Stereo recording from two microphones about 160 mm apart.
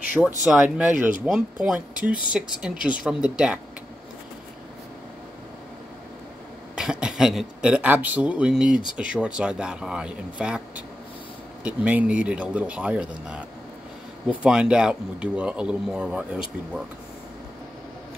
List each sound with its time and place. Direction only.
0.2 s speech: 5° left (ahead or behind)
0.5 s speech: 5° right (ahead or behind)
6.7 s speech: 5° right (ahead or behind)
11.6 s speech: 10° right (ahead or behind)